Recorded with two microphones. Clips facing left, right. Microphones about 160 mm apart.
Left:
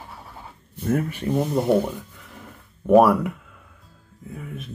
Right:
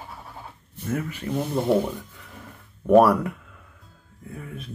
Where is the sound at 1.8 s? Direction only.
Centre (ahead or behind).